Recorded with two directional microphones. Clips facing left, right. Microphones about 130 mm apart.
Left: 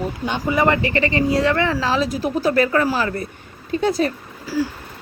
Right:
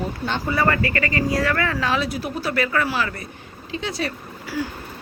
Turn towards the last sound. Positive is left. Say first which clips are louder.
# left 5 dB
turn(degrees=40)  # may be behind; listen again after turning